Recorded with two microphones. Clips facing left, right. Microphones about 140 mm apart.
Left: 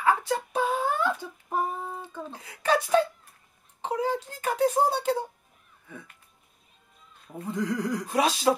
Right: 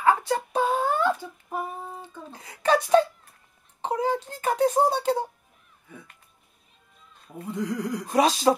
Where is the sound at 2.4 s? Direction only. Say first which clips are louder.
Right 3 dB; 35° right (ahead or behind).